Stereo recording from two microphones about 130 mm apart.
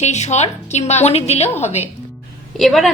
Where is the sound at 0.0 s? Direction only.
60° left (ahead or behind).